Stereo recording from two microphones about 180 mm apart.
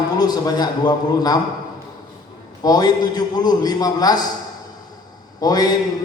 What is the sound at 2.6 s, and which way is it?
Speech, 20° left (ahead or behind).